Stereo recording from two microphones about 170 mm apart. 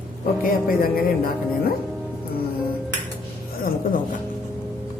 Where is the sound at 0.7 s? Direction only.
60° left (ahead or behind).